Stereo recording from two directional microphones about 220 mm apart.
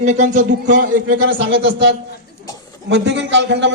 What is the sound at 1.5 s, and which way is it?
A man's voice, 55° right (ahead or behind).